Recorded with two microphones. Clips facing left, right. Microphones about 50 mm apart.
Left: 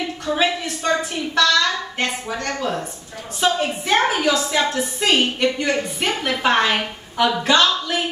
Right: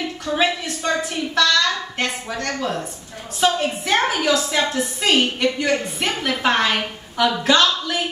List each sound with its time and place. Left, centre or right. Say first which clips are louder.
0.3 s a woman's voice: even; centre